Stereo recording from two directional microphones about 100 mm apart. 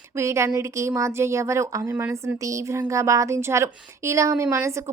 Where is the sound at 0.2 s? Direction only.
30° right (ahead or behind).